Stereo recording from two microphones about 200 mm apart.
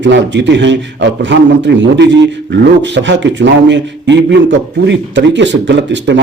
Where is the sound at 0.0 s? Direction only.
60° right (ahead or behind).